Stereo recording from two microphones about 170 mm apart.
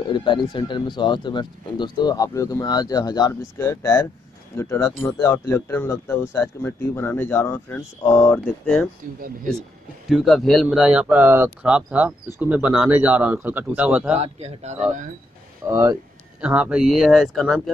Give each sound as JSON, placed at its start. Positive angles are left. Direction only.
{"t": 0.1, "sound": "speech", "side_deg": 25}
{"t": 10.0, "sound": "speech", "side_deg": 0}
{"t": 14.1, "sound": "speech", "side_deg": -40}
{"t": 15.6, "sound": "speech", "side_deg": -15}